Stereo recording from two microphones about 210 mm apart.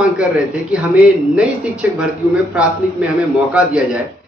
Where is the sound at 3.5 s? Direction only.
5° right (ahead or behind).